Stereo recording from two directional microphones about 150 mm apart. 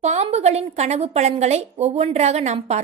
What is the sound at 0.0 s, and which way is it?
A woman's voice, 50° right (ahead or behind).